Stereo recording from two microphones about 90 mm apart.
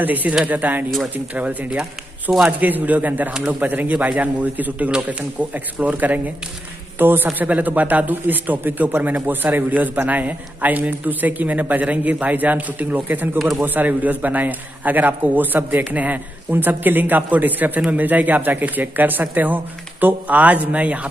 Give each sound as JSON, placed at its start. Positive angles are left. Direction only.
{"t": 0.0, "sound": "a man's voice", "side_deg": -20}
{"t": 13.4, "sound": "a man's voice", "side_deg": 0}
{"t": 13.7, "sound": "a man's voice", "side_deg": -20}